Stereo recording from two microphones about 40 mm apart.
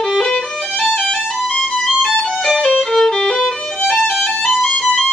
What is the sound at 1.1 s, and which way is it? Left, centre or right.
Music, centre.